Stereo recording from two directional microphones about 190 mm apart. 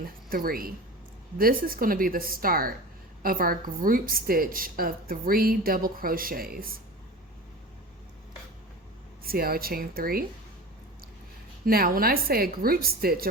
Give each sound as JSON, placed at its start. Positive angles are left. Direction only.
{"t": 0.3, "sound": "a woman's voice", "side_deg": -50}
{"t": 9.2, "sound": "a woman's voice", "side_deg": -50}
{"t": 11.6, "sound": "a woman's voice", "side_deg": -50}